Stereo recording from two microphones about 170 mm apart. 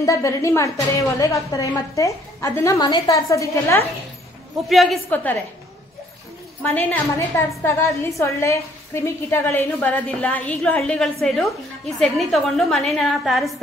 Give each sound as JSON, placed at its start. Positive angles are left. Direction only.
{"t": 0.0, "sound": "a woman's voice", "side_deg": 20}
{"t": 4.6, "sound": "a woman's voice", "side_deg": 0}
{"t": 6.6, "sound": "a woman's voice", "side_deg": 10}